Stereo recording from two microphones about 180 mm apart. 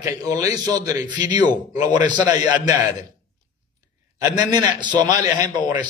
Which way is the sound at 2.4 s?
20° right (ahead or behind).